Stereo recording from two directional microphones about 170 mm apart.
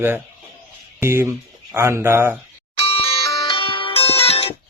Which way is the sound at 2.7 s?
35° left (ahead or behind).